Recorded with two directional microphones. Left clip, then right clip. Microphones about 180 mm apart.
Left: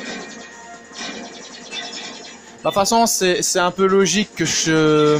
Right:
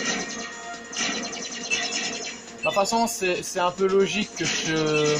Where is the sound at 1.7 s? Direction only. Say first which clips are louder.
Right 3 dB; centre (ahead or behind).